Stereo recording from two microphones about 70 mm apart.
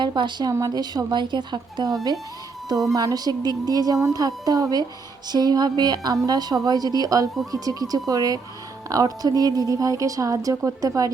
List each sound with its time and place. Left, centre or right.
0.0 s a woman's voice: right
0.6 s a woman's voice: right
2.9 s a woman's voice: right
5.3 s a woman's voice: right